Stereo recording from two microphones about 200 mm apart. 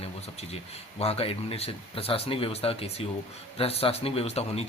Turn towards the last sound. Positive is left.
turn(degrees=30)  # may be behind; listen again after turning